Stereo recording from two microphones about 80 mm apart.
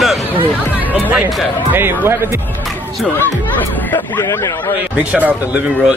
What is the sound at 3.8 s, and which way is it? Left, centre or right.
Speech, left.